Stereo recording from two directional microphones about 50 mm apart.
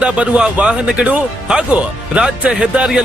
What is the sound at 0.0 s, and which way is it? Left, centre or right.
A man's voice, right.